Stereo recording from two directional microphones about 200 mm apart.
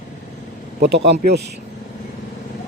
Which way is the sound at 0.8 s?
55° right (ahead or behind).